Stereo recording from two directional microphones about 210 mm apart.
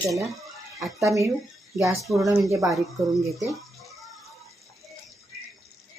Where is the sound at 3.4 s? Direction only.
Centre (ahead or behind).